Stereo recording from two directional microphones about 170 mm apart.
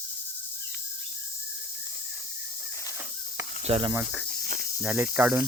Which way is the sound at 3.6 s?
30° right (ahead or behind).